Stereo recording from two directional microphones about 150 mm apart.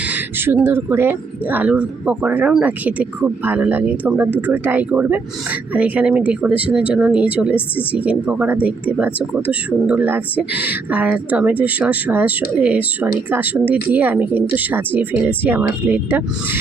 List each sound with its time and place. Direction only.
0.1 s speech: 15° right (ahead or behind)